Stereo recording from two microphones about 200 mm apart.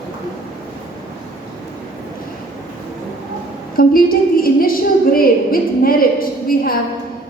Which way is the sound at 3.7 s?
45° left (ahead or behind).